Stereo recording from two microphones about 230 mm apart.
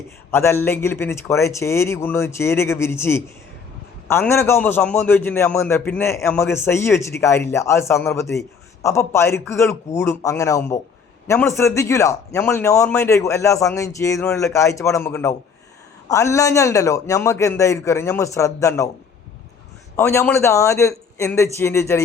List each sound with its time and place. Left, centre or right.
0.3 s a man's voice: centre
20.0 s a man's voice: centre